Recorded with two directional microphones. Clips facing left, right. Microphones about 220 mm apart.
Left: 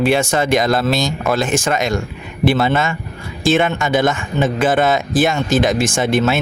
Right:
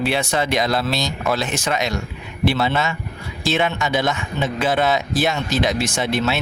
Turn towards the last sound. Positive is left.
turn(degrees=50)  # may be behind; listen again after turning